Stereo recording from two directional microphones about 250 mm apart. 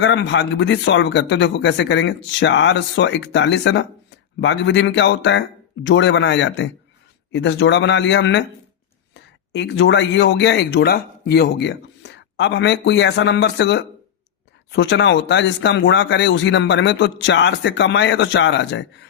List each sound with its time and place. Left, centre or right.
0.0 s speech: left